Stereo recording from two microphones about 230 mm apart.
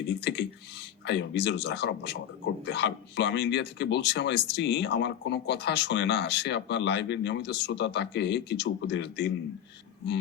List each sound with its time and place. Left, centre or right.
0.1 s speech: left